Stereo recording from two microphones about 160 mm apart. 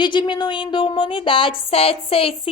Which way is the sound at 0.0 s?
30° left (ahead or behind).